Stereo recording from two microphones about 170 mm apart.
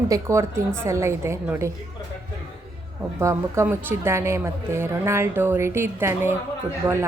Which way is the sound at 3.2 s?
15° right (ahead or behind).